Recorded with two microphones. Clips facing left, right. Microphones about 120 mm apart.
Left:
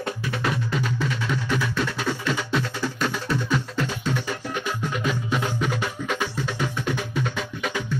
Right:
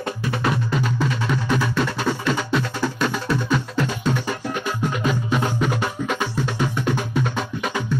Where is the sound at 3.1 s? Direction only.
60° right (ahead or behind).